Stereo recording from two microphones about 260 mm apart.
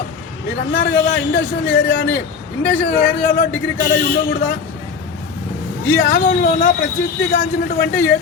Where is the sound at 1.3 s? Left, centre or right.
Left.